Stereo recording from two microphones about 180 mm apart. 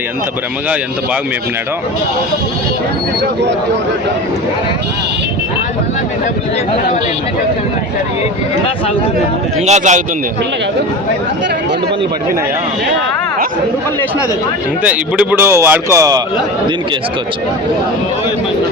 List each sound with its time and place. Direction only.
9.6 s a man's voice: 40° right (ahead or behind)
14.8 s speech: 10° right (ahead or behind)